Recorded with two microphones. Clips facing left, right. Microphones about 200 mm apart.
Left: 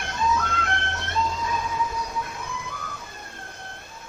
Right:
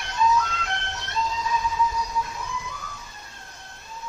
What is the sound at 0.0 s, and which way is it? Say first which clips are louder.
Music: right 2 dB; 50° left (ahead or behind).